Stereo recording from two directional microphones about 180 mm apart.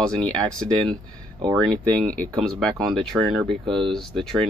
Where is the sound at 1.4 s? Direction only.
20° right (ahead or behind).